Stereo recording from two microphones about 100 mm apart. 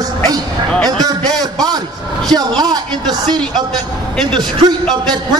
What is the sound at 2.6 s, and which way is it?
Speech, 45° right (ahead or behind).